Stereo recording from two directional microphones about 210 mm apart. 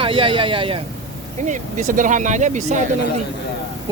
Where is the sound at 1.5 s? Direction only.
35° right (ahead or behind).